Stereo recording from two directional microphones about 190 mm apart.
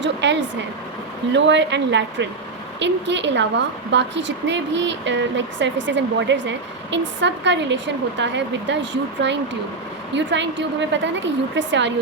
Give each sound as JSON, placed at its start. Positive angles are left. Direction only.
{"t": 0.0, "sound": "a woman's voice", "side_deg": -70}